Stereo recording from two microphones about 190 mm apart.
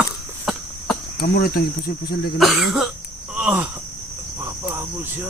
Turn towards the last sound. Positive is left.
turn(degrees=-10)  # may be behind; listen again after turning